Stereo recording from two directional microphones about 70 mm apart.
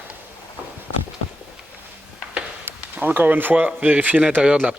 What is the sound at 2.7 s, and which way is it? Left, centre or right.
A man's voice, right.